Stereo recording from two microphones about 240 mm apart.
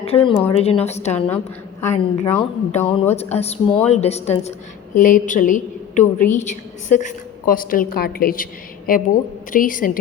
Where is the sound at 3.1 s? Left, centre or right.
Left.